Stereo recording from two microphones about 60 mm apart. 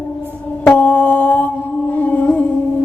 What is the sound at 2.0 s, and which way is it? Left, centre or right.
Music, left.